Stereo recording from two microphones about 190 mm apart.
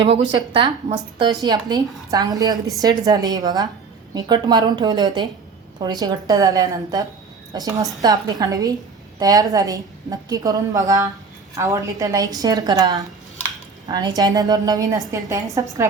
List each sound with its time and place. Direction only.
0.3 s speech: 25° right (ahead or behind)